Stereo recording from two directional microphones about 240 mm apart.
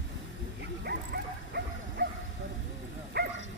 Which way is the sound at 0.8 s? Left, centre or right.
Right.